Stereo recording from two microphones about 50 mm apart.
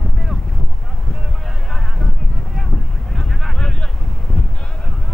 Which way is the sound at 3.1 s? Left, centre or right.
Centre.